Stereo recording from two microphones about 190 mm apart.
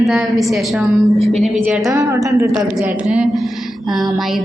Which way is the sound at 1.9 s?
15° right (ahead or behind).